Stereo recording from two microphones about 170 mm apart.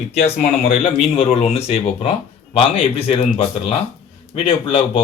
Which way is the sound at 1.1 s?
35° left (ahead or behind).